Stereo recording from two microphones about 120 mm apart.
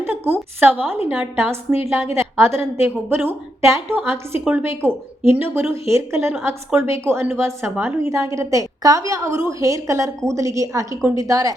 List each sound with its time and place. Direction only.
0.0 s a woman's voice: 20° right (ahead or behind)